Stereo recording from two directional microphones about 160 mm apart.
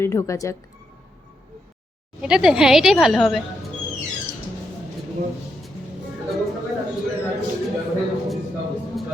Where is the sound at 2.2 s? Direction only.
5° right (ahead or behind).